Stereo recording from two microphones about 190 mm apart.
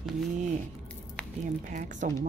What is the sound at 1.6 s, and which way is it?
Speech, 40° right (ahead or behind).